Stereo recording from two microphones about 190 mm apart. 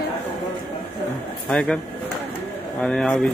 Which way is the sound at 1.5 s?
5° left (ahead or behind).